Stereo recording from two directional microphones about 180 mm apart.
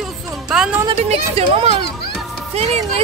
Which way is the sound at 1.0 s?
35° right (ahead or behind).